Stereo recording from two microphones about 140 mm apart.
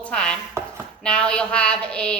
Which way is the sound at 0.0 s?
5° left (ahead or behind).